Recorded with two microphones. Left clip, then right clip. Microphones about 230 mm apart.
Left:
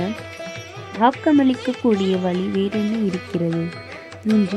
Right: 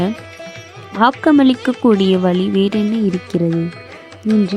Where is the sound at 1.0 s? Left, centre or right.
Right.